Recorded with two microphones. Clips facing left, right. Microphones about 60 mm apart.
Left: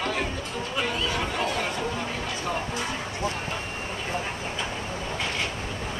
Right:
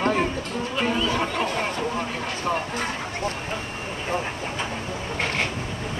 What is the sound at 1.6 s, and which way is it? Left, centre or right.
Vehicle, right.